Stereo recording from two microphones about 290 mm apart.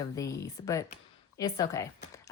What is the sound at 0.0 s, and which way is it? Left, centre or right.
A woman's voice, centre.